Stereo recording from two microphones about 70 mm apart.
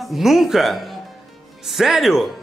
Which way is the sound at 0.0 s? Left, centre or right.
Centre.